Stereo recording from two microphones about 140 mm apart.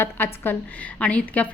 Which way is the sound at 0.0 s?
15° left (ahead or behind).